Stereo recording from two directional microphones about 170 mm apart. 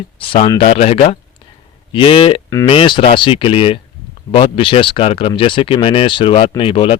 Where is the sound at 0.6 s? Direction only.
40° left (ahead or behind).